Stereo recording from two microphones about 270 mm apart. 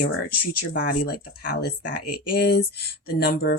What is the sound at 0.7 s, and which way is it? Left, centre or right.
Speech, left.